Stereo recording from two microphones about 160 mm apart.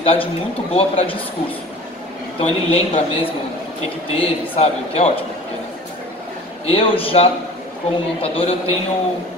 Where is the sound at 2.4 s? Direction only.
35° left (ahead or behind).